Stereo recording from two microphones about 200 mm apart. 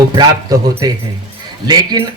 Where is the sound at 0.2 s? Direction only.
20° right (ahead or behind).